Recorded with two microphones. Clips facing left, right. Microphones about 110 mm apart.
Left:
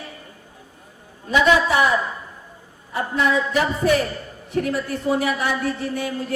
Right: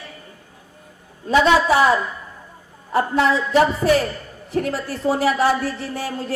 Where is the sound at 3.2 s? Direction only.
30° right (ahead or behind).